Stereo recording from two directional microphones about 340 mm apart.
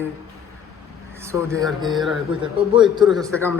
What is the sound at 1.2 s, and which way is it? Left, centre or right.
Speech, centre.